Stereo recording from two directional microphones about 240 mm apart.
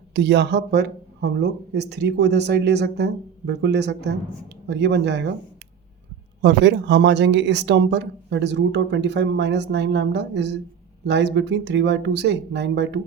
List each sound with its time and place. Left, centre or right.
0.1 s speech: right
6.4 s speech: right